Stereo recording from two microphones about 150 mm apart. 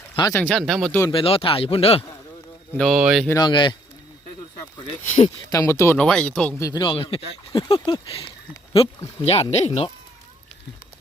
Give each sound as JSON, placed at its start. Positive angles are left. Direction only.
{"t": 0.2, "sound": "speech", "side_deg": 20}
{"t": 0.4, "sound": "speech", "side_deg": 0}
{"t": 1.1, "sound": "speech", "side_deg": 40}
{"t": 2.7, "sound": "speech", "side_deg": 0}
{"t": 3.2, "sound": "speech", "side_deg": 25}
{"t": 5.0, "sound": "speech", "side_deg": 55}
{"t": 5.5, "sound": "speech", "side_deg": 20}
{"t": 6.0, "sound": "speech", "side_deg": 5}
{"t": 6.6, "sound": "speech", "side_deg": 25}
{"t": 6.9, "sound": "speech", "side_deg": 40}